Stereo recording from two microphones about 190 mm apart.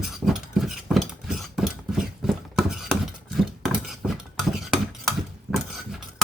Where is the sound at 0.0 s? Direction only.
Centre (ahead or behind).